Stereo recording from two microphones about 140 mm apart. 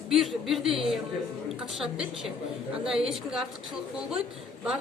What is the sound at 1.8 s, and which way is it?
Speech, centre (ahead or behind).